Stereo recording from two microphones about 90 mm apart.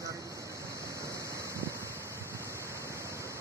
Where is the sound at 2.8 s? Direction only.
35° right (ahead or behind).